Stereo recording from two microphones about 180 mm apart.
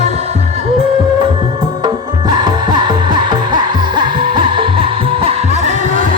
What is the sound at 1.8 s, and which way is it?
Music, 20° right (ahead or behind).